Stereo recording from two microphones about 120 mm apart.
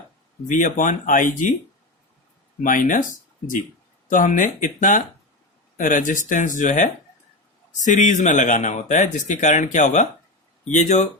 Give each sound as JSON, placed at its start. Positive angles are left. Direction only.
{"t": 0.4, "sound": "speech", "side_deg": 90}
{"t": 2.6, "sound": "speech", "side_deg": 90}
{"t": 4.1, "sound": "speech", "side_deg": 90}